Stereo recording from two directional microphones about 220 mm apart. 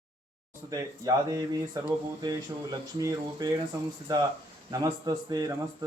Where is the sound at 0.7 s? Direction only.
15° right (ahead or behind).